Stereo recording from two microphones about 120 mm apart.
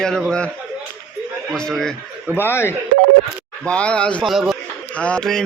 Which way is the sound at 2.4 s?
20° left (ahead or behind).